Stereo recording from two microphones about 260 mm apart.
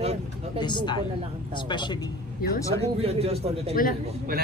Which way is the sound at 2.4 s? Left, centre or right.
Left.